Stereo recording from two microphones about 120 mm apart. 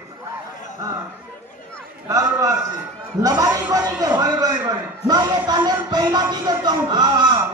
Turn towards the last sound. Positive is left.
turn(degrees=-35)  # may be behind; listen again after turning